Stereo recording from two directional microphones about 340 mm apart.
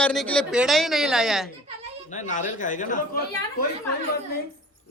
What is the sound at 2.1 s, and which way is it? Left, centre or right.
Speech, left.